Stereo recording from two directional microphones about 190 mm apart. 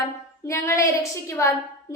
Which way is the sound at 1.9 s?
15° left (ahead or behind).